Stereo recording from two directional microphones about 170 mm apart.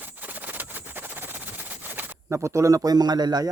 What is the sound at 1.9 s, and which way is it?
Speech, 10° right (ahead or behind).